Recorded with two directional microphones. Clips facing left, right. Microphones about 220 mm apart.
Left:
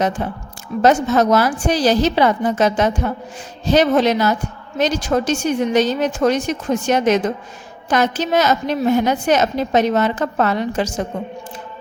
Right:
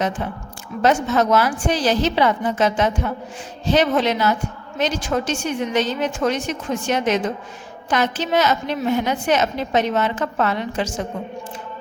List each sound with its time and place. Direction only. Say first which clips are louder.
0.2 s a woman's voice: left 3 dB; 40° left (ahead or behind)